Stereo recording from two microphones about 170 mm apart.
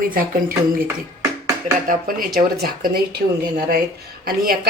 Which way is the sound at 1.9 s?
55° right (ahead or behind).